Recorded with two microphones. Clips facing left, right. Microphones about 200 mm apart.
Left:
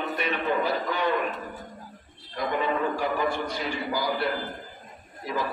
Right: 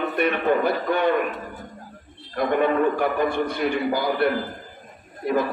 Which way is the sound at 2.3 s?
55° right (ahead or behind).